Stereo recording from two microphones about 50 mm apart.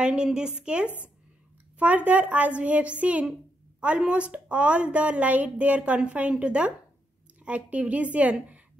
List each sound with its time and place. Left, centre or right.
0.0 s speech: centre
1.8 s a woman's voice: right
5.8 s a woman's voice: right